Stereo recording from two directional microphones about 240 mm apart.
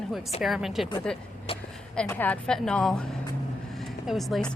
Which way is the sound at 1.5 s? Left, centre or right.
Left.